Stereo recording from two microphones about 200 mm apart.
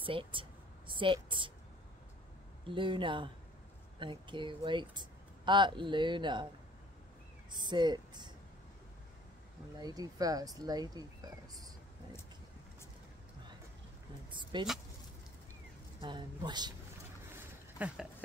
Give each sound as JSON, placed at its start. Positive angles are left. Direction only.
{"t": 0.0, "sound": "speech", "side_deg": -25}
{"t": 2.6, "sound": "speech", "side_deg": -25}
{"t": 7.5, "sound": "speech", "side_deg": -20}
{"t": 9.8, "sound": "speech", "side_deg": -20}
{"t": 14.3, "sound": "speech", "side_deg": -25}
{"t": 16.0, "sound": "speech", "side_deg": -25}
{"t": 17.7, "sound": "a sound", "side_deg": -5}